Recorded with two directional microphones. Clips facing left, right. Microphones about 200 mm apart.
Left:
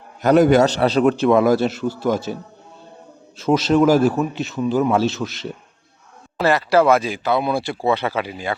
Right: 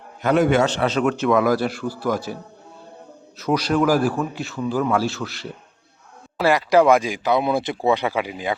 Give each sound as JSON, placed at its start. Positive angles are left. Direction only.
{"t": 0.2, "sound": "a man's voice", "side_deg": 40}
{"t": 6.3, "sound": "speech", "side_deg": -10}